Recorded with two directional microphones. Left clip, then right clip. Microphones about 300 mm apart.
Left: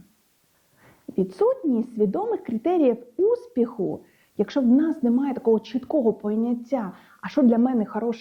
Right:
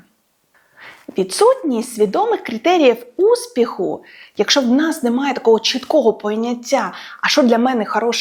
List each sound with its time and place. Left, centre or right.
0.8 s a woman's voice: centre
3.8 s speech: right
4.0 s a woman's voice: centre